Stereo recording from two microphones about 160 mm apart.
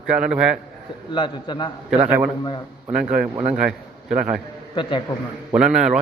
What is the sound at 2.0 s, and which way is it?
Speech, 10° right (ahead or behind).